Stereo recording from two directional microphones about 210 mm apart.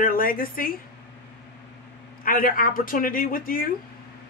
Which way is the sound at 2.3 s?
40° left (ahead or behind).